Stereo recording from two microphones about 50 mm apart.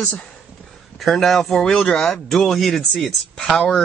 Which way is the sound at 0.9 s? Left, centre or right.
Centre.